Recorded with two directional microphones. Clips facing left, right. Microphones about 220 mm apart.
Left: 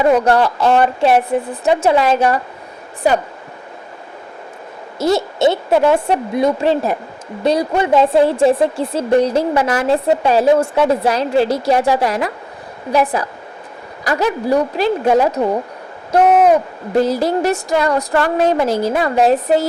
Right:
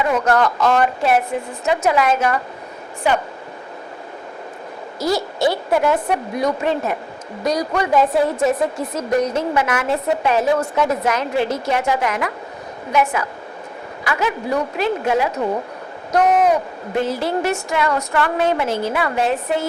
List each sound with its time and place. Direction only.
0.0 s a woman's voice: 30° left (ahead or behind)
4.9 s a woman's voice: 25° left (ahead or behind)
16.9 s a woman's voice: 40° left (ahead or behind)